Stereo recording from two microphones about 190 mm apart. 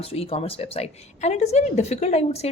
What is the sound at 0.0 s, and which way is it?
A woman's voice, 30° left (ahead or behind).